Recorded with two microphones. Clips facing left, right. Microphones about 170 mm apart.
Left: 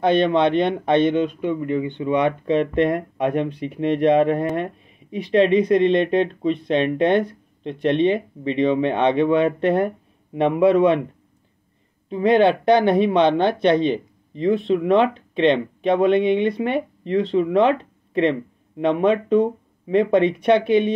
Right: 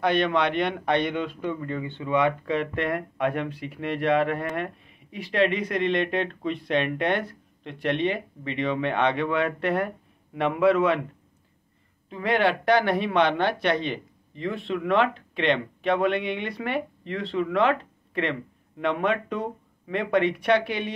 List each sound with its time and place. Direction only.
0.0 s speech: 20° left (ahead or behind)
12.1 s speech: 20° left (ahead or behind)